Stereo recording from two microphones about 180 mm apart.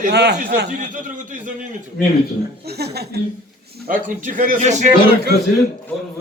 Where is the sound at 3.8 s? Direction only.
45° right (ahead or behind).